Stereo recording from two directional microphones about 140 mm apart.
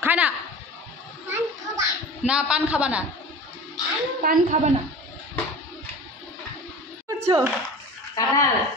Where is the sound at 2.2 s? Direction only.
5° right (ahead or behind).